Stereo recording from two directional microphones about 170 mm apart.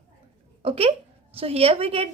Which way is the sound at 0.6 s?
35° right (ahead or behind).